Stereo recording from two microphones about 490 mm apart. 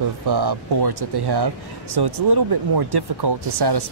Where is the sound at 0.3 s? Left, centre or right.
Right.